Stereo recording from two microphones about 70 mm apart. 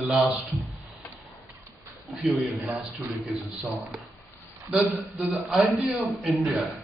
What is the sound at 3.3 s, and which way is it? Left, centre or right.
A man's voice, centre.